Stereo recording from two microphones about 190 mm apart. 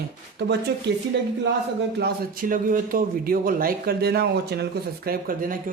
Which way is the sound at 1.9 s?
55° right (ahead or behind).